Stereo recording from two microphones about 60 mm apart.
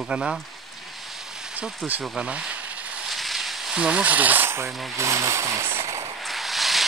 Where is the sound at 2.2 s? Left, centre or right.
Centre.